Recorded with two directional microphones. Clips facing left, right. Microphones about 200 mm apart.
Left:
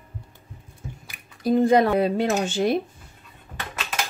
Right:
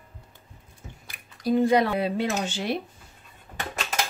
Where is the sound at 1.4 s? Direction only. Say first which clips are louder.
Left 3 dB; 50° left (ahead or behind).